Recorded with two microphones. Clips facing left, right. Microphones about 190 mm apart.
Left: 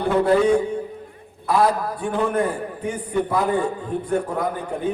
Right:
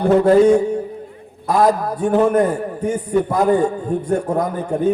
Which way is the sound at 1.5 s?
45° right (ahead or behind).